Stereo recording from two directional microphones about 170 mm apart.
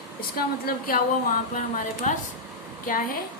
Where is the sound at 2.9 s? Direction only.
50° left (ahead or behind).